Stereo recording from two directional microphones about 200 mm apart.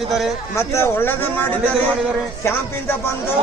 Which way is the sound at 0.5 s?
15° left (ahead or behind).